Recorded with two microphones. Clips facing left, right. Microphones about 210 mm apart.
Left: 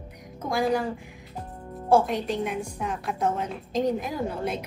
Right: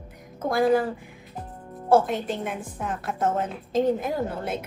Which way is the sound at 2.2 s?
50° right (ahead or behind).